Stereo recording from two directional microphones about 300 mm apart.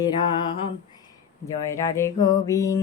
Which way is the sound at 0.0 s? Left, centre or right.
Centre.